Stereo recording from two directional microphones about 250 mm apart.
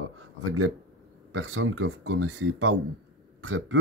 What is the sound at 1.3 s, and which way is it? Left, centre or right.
Speech, right.